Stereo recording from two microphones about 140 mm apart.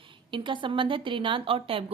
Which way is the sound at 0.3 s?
35° right (ahead or behind).